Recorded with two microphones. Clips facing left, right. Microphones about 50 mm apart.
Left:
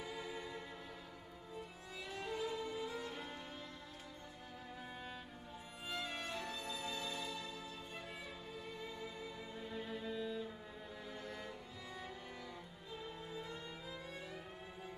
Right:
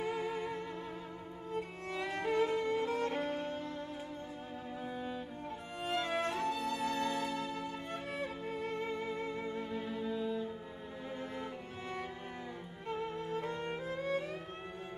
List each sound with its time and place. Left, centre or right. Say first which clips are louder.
0.0 s music: right 10 dB; right
1.5 s violin: right 12 dB; right
4.9 s music: right 10 dB; centre
5.9 s music: right 10 dB; right
9.7 s music: right 6 dB; centre
12.9 s music: right 10 dB; right